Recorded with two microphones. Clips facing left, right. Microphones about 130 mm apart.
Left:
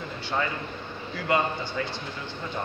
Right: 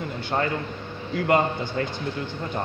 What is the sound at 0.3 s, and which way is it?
Speech, 40° right (ahead or behind).